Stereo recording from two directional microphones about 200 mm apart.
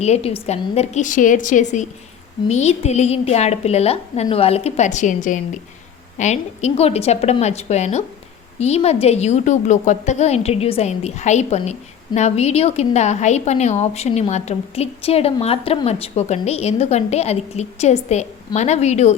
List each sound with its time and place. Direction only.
0.0 s a woman's voice: 30° left (ahead or behind)